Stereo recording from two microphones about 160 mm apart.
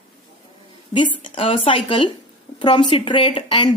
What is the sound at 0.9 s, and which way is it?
Speech, 30° left (ahead or behind).